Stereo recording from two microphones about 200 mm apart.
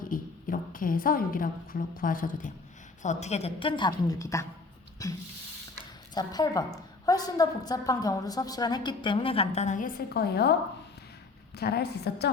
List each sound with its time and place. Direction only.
0.0 s a woman's voice: 45° left (ahead or behind)